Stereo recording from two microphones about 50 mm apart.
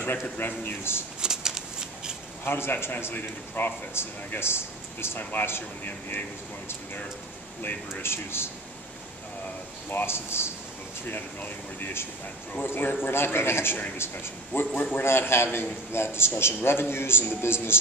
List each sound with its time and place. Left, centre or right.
0.0 s a man's voice: left
1.2 s shuffling cards: centre
2.4 s a man's voice: left
4.0 s a man's voice: left
5.9 s a man's voice: left
7.6 s a man's voice: left
9.8 s speech: left
11.1 s a man's voice: left
12.6 s a man's voice: left
14.8 s a man's voice: left
15.0 s a man's voice: left